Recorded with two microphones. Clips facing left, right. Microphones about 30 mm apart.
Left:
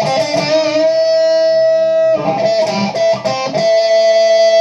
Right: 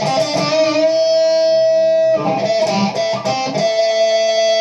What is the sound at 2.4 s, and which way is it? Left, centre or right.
Music, centre.